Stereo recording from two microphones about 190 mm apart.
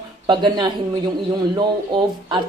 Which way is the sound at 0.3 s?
25° right (ahead or behind).